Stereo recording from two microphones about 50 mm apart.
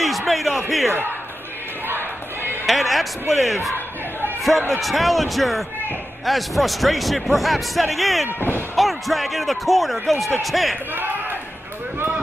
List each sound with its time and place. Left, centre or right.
0.3 s a man's voice: centre
1.9 s crowd: right
2.6 s a man's voice: centre
8.4 s speech: left
8.7 s a man's voice: centre
11.0 s a sound: right